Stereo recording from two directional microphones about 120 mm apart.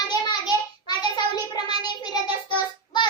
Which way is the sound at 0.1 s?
35° left (ahead or behind).